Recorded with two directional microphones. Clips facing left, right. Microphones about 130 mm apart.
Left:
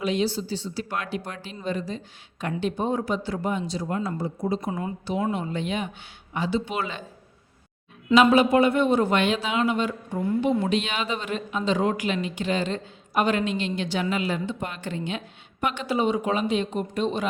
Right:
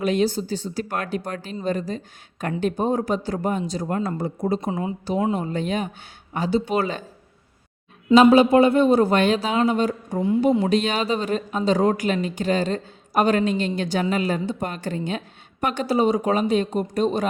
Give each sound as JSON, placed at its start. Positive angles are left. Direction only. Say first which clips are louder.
{"t": 0.0, "sound": "speech", "louder": "right 4 dB", "side_deg": -50}
{"t": 4.6, "sound": "speech", "louder": "right 3 dB", "side_deg": -20}
{"t": 5.3, "sound": "speech", "louder": "right 4 dB", "side_deg": -40}
{"t": 8.1, "sound": "speech", "louder": "right 4 dB", "side_deg": -35}